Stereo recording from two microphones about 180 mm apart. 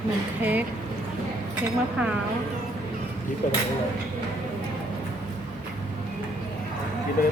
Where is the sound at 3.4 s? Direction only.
45° left (ahead or behind).